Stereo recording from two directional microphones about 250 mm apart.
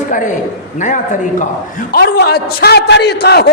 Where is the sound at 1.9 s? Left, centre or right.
Left.